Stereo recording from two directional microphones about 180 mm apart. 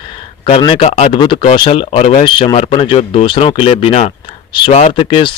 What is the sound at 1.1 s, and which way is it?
Speech, 25° left (ahead or behind).